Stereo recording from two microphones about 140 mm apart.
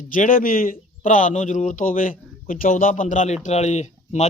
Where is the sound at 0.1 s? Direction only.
75° left (ahead or behind).